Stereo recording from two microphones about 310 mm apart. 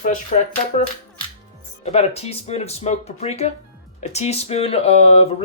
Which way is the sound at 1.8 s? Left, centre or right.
Centre.